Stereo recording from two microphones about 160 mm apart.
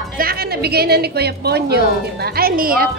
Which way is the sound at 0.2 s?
75° right (ahead or behind).